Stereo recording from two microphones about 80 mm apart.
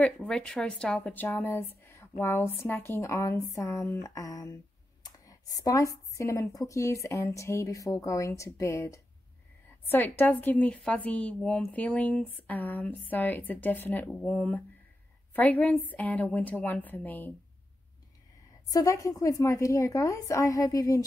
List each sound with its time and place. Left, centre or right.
0.3 s a woman's voice: centre
1.1 s speech: left
9.8 s a woman's voice: left
18.7 s a woman's voice: left